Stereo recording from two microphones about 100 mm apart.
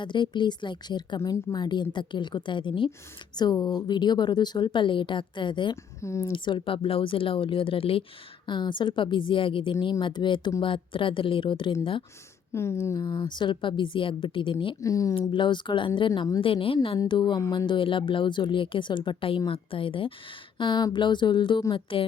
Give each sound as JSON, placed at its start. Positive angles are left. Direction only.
{"t": 0.0, "sound": "speech", "side_deg": 50}
{"t": 1.2, "sound": "a woman's voice", "side_deg": 30}
{"t": 1.5, "sound": "speech", "side_deg": 45}
{"t": 3.3, "sound": "speech", "side_deg": 45}
{"t": 6.0, "sound": "speech", "side_deg": 30}
{"t": 6.3, "sound": "speech", "side_deg": 55}
{"t": 8.4, "sound": "speech", "side_deg": 50}
{"t": 12.5, "sound": "speech", "side_deg": 25}
{"t": 13.2, "sound": "speech", "side_deg": 50}
{"t": 14.8, "sound": "a woman's voice", "side_deg": 35}
{"t": 15.3, "sound": "speech", "side_deg": 50}
{"t": 16.4, "sound": "speech", "side_deg": 65}
{"t": 21.7, "sound": "speech", "side_deg": 60}